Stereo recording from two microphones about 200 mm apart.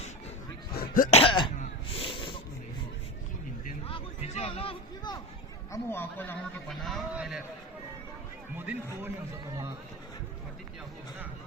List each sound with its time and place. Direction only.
0.7 s throat clearing: 45° left (ahead or behind)
1.2 s throat clearing: 25° left (ahead or behind)
1.9 s a sound: 25° left (ahead or behind)
3.8 s a sound: 30° left (ahead or behind)
5.7 s a man's voice: 10° left (ahead or behind)
8.5 s a man's voice: 10° right (ahead or behind)